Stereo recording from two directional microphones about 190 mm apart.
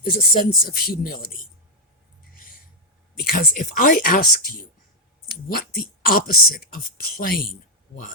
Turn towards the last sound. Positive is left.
turn(degrees=50)  # may be behind; listen again after turning